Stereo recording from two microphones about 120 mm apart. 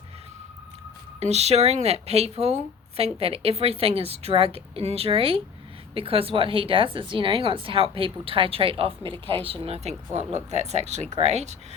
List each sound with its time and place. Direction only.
1.2 s a woman's voice: 65° right (ahead or behind)
9.1 s speech: 15° left (ahead or behind)
9.4 s a woman's voice: 55° right (ahead or behind)